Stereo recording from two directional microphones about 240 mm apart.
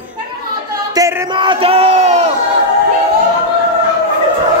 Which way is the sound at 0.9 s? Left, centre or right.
Centre.